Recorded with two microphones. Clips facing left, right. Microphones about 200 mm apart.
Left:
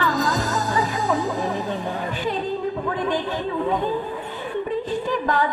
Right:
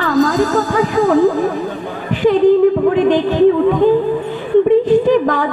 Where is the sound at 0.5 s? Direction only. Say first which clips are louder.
Right 9 dB; 90° right.